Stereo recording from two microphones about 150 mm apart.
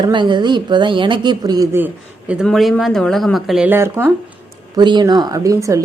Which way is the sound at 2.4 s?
5° left (ahead or behind).